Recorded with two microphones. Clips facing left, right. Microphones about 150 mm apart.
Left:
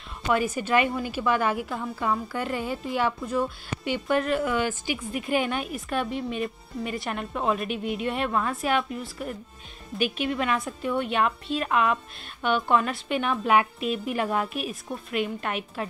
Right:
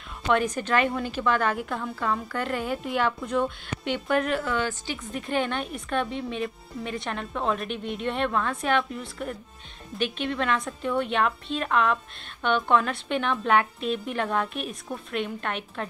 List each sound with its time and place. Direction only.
0.3 s a woman's voice: 5° left (ahead or behind)
4.4 s a woman's voice: 15° left (ahead or behind)